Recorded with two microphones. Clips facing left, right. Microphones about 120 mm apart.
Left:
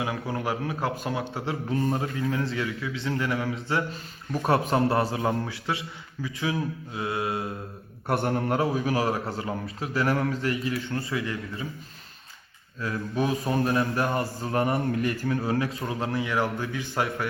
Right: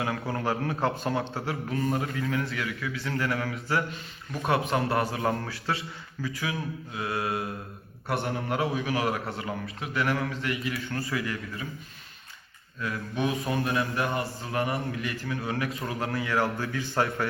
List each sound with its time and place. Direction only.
0.0 s speech: 10° left (ahead or behind)
1.5 s a man's voice: 25° left (ahead or behind)
4.3 s mantra: 40° left (ahead or behind)
4.7 s a man's voice: 30° left (ahead or behind)
8.0 s a man's voice: 50° left (ahead or behind)
8.4 s mantra: 30° left (ahead or behind)
9.4 s a man's voice: 30° left (ahead or behind)
12.8 s mantra: 30° left (ahead or behind)
15.4 s mantra: 30° left (ahead or behind)
15.9 s a man's voice: 25° left (ahead or behind); by 17.2 s 10° left (ahead or behind)